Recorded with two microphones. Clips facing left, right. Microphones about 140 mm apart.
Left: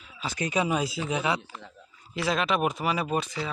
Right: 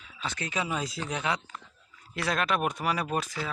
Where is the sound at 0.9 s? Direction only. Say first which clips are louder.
Left 3 dB; 5° left (ahead or behind).